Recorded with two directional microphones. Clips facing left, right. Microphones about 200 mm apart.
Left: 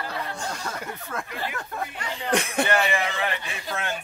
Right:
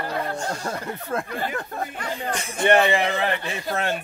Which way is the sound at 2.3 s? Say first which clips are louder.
Left 6 dB; 65° left (ahead or behind).